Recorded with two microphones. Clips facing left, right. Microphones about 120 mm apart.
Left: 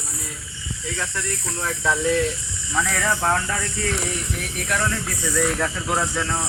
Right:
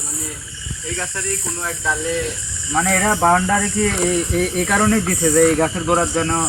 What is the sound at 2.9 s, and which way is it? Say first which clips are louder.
Speech: right 8 dB; 65° right (ahead or behind).